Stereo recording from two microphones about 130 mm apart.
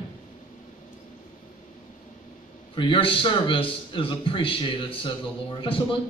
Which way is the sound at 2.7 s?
40° left (ahead or behind).